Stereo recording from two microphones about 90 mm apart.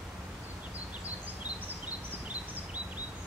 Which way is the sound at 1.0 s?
20° right (ahead or behind).